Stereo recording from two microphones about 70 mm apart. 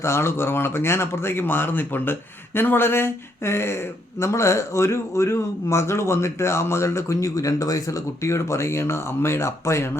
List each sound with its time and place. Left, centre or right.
0.0 s speech: left